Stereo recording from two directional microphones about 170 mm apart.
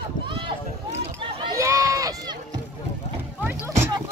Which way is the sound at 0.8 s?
30° right (ahead or behind).